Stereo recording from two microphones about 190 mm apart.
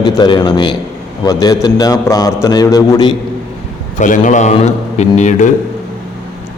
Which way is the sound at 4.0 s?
40° left (ahead or behind).